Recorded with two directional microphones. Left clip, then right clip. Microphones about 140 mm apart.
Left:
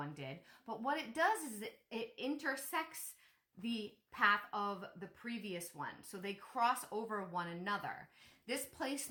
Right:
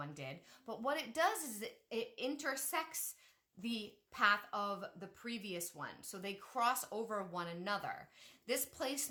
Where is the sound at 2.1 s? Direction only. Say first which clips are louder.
Left 4 dB; 30° right (ahead or behind).